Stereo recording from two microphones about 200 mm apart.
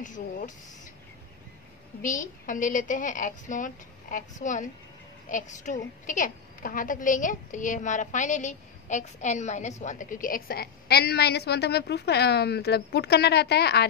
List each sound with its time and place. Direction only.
0.0 s a woman's voice: 40° left (ahead or behind)
2.0 s a woman's voice: 40° left (ahead or behind)